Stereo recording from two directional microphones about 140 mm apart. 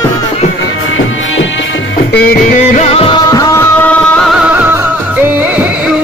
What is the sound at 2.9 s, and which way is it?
Music, 40° left (ahead or behind).